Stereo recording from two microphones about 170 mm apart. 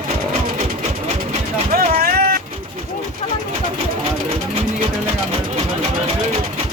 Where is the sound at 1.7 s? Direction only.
60° right (ahead or behind).